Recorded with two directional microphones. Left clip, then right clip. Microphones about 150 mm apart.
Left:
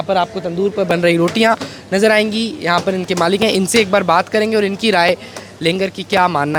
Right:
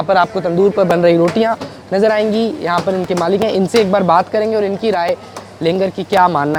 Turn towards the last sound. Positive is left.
turn(degrees=15)  # may be behind; listen again after turning